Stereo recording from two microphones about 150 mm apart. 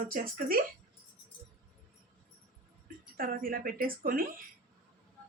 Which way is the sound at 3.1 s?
75° right (ahead or behind).